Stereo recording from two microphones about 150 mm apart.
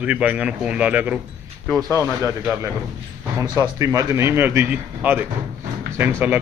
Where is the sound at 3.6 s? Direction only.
20° right (ahead or behind).